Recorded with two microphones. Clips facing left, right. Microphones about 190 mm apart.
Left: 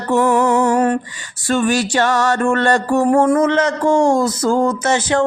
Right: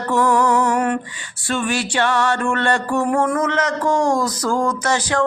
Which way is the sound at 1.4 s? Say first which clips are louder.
Left 5 dB; 40° left (ahead or behind).